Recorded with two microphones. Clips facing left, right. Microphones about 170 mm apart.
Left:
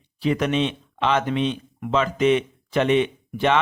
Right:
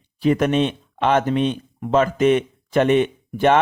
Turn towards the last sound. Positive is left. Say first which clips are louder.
# right 4 dB
turn(degrees=-50)  # may be behind; listen again after turning